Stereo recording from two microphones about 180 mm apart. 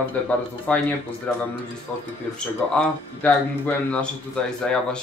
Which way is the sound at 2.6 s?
5° left (ahead or behind).